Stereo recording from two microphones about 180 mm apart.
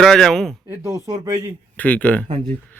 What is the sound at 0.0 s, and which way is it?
Speech, centre (ahead or behind).